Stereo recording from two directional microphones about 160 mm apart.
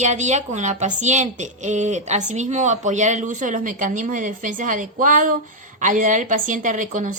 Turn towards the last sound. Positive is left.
turn(degrees=-55)  # may be behind; listen again after turning